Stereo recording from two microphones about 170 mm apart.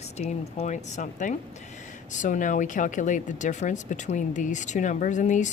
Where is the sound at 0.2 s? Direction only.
40° left (ahead or behind).